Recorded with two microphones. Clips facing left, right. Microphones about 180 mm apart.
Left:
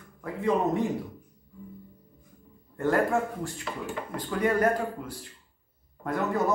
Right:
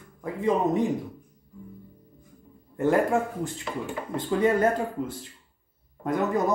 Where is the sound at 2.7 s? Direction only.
20° right (ahead or behind).